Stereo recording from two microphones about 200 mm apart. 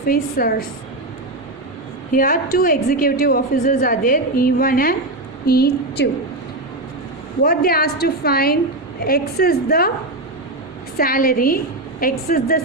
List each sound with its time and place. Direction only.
0.1 s a woman's voice: 50° left (ahead or behind)
2.1 s a woman's voice: 45° left (ahead or behind)
7.4 s a woman's voice: 50° left (ahead or behind)
10.9 s a woman's voice: 45° left (ahead or behind)